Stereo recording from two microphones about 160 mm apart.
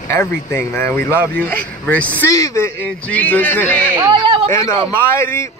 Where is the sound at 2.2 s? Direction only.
20° left (ahead or behind).